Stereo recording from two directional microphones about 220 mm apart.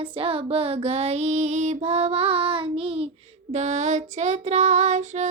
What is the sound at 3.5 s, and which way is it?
A woman's voice, 30° right (ahead or behind).